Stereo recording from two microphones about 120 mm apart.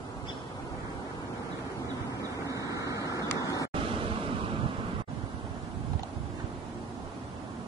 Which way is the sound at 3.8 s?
45° right (ahead or behind).